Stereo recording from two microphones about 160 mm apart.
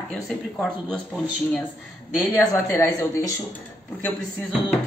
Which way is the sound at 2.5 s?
15° left (ahead or behind).